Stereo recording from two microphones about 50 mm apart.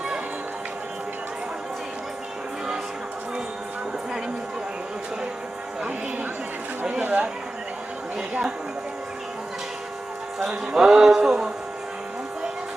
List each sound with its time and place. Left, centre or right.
7.0 s chatter: right
8.3 s a sound: right
10.4 s speech: centre